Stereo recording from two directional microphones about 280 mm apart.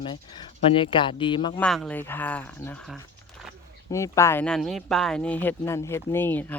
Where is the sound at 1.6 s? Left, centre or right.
Centre.